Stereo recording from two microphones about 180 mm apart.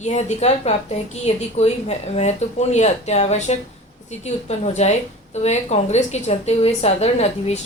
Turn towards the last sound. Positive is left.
turn(degrees=35)  # may be behind; listen again after turning